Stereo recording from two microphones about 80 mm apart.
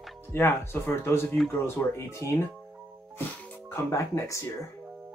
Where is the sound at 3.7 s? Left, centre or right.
Left.